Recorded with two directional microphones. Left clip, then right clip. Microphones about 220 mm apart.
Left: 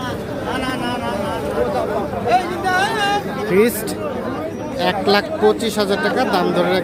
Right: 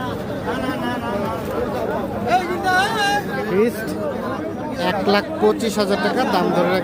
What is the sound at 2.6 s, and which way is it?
Speech, 15° right (ahead or behind).